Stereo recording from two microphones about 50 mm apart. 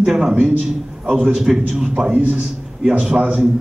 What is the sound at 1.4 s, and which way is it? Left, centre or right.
Speech, centre.